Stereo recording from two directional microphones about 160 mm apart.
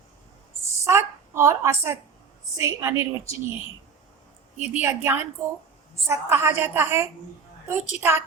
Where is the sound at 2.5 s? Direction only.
20° right (ahead or behind).